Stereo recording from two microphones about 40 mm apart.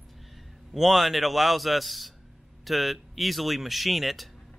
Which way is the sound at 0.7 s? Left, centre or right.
Centre.